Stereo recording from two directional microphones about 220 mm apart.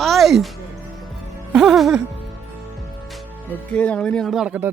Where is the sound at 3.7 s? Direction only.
5° left (ahead or behind).